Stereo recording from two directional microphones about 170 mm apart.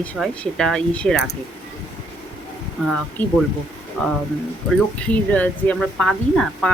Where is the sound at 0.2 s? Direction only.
5° left (ahead or behind).